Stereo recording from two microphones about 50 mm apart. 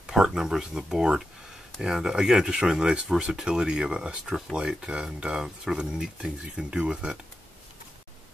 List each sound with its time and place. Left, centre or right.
0.0 s speech: centre